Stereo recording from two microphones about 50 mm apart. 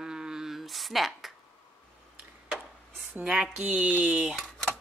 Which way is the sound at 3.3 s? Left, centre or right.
Right.